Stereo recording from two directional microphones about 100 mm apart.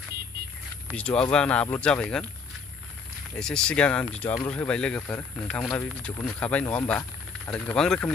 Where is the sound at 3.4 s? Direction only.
10° left (ahead or behind).